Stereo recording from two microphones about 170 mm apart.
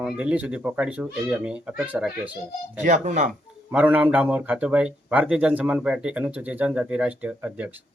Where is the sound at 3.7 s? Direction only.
10° right (ahead or behind).